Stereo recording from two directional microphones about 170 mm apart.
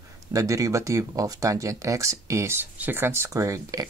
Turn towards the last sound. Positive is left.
turn(degrees=-20)  # may be behind; listen again after turning